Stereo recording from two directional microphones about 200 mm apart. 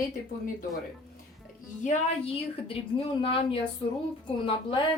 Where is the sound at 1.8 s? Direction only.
35° left (ahead or behind).